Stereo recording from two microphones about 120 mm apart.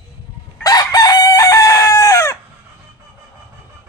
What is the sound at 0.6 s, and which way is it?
Chicken, 35° left (ahead or behind).